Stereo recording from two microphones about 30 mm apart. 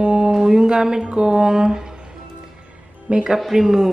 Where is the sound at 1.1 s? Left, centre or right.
Right.